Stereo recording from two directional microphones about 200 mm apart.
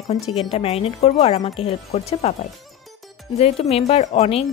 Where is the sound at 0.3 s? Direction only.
30° left (ahead or behind).